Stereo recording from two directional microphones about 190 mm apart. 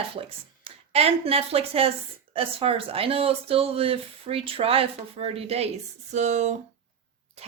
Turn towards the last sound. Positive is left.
turn(degrees=-40)  # may be behind; listen again after turning